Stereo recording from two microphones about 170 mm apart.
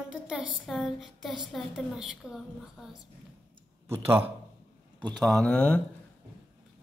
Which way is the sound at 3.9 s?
15° right (ahead or behind).